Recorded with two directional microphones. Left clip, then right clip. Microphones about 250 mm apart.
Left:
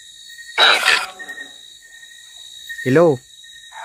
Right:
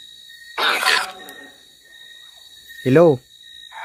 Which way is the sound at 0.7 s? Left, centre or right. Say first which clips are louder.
Left 3 dB; centre.